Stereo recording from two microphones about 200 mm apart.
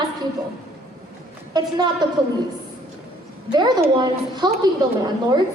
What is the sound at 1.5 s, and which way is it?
Speech, 20° right (ahead or behind).